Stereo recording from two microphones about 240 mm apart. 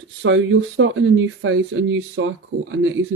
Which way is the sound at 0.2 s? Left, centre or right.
Right.